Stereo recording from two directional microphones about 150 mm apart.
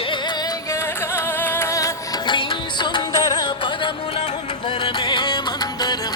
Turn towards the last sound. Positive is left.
turn(degrees=30)  # may be behind; listen again after turning